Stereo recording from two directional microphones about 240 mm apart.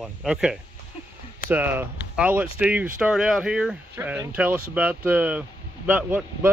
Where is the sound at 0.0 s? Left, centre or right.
Centre.